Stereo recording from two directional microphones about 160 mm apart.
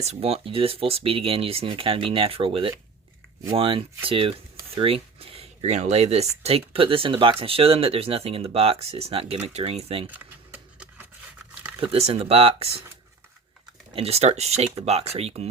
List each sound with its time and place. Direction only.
0.0 s speech: 40° right (ahead or behind)
10.1 s a sound: 10° right (ahead or behind)
11.8 s speech: 40° right (ahead or behind)
13.9 s speech: 40° right (ahead or behind)